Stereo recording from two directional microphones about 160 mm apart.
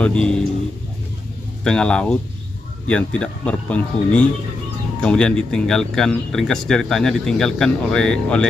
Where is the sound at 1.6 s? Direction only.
5° left (ahead or behind).